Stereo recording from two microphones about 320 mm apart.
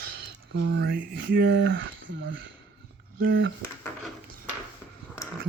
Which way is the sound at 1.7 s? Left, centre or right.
Right.